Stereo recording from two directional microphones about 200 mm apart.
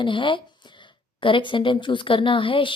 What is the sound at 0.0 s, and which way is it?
A woman's voice, 25° left (ahead or behind).